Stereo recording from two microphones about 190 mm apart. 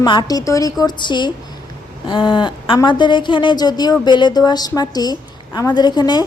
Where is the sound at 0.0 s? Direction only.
20° left (ahead or behind).